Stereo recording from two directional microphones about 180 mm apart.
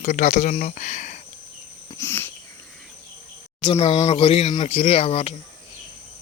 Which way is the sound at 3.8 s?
35° left (ahead or behind).